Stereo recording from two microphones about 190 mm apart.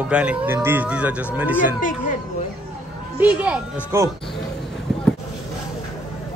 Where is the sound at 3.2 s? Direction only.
5° right (ahead or behind).